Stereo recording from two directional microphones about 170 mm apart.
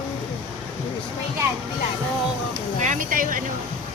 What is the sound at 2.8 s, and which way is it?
Speech, 50° right (ahead or behind).